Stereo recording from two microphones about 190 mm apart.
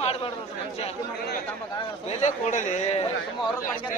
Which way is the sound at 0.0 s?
30° left (ahead or behind).